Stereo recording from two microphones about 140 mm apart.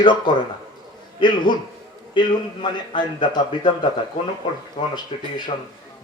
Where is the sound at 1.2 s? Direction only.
35° left (ahead or behind).